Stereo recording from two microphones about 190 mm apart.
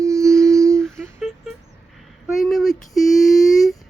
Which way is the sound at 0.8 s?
Centre (ahead or behind).